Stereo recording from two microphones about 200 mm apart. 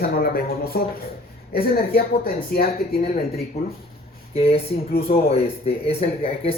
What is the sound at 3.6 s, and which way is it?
Speech, 30° left (ahead or behind).